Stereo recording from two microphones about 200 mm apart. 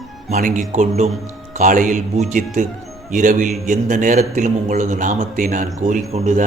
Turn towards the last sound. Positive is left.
turn(degrees=-40)  # may be behind; listen again after turning